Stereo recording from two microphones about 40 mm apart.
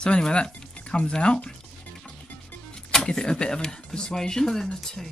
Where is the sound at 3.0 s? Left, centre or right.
Left.